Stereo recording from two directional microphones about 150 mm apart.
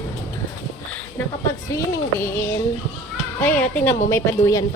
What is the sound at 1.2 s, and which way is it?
A woman's voice, 15° left (ahead or behind).